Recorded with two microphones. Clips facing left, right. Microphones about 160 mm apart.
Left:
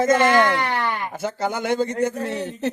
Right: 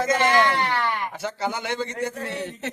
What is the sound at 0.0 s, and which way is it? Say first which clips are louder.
Speech: left 4 dB; 50° left (ahead or behind).